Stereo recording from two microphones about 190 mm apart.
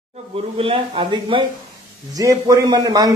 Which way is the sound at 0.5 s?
30° right (ahead or behind).